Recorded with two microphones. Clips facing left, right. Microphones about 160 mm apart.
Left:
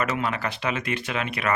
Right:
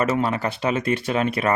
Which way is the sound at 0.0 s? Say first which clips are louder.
Right 5 dB; 30° right (ahead or behind).